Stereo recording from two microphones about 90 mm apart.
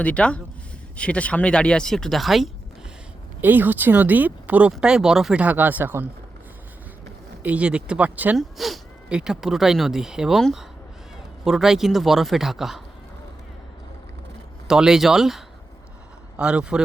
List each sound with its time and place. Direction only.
0.0 s speech: 15° left (ahead or behind)
3.4 s speech: 20° right (ahead or behind)
7.4 s speech: 15° right (ahead or behind)
8.4 s speech: centre (ahead or behind)
14.7 s speech: 5° right (ahead or behind)